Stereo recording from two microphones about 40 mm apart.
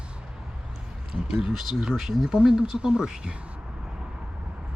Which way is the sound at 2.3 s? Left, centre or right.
Centre.